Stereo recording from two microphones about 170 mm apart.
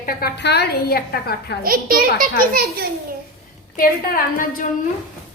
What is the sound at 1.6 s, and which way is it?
A child's voice, 55° right (ahead or behind).